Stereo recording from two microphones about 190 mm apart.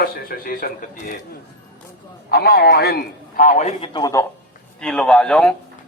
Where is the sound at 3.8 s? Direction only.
25° left (ahead or behind).